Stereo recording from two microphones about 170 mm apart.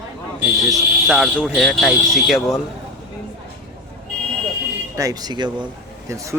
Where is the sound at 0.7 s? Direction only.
Centre (ahead or behind).